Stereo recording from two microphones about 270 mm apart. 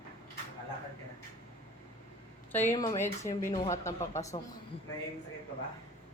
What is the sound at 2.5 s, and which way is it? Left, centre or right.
A woman's voice, centre.